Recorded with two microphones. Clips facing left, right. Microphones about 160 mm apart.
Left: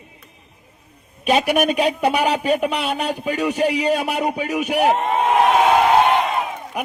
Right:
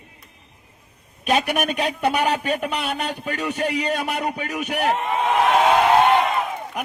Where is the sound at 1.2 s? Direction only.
10° left (ahead or behind).